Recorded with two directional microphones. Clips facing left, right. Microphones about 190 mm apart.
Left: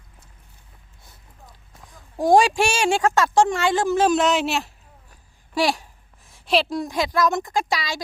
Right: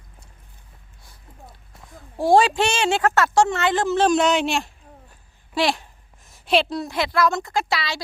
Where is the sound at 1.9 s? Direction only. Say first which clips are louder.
Even; 15° left (ahead or behind).